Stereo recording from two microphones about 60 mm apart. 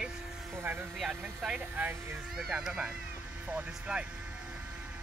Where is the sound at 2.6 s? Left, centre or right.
Centre.